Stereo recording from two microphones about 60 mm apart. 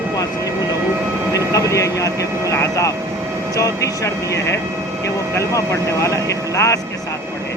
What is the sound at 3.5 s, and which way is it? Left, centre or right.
Speech, left.